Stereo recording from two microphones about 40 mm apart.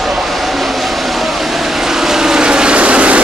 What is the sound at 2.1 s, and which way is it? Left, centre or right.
Vehicle, centre.